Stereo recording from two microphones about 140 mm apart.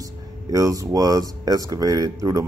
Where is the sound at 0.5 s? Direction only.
25° right (ahead or behind).